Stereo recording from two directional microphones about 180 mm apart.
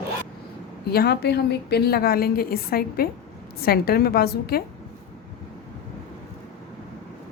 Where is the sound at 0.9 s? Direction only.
65° left (ahead or behind).